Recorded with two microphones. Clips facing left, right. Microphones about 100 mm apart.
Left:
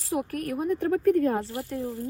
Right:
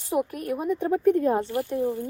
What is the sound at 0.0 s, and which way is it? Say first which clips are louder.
Speech: right 2 dB; 5° right (ahead or behind).